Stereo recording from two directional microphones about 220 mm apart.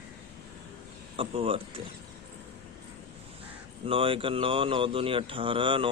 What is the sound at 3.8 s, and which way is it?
Speech, 25° right (ahead or behind).